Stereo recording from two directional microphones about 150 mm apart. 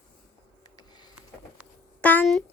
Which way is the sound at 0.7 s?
25° left (ahead or behind).